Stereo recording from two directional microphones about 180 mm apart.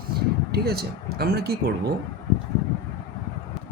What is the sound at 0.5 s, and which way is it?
Speech, 60° right (ahead or behind).